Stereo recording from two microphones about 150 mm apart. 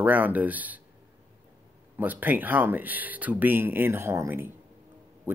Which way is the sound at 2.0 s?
10° right (ahead or behind).